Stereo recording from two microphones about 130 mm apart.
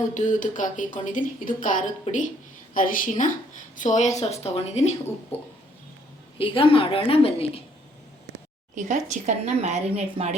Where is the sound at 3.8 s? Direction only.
70° left (ahead or behind); by 4.9 s 55° left (ahead or behind).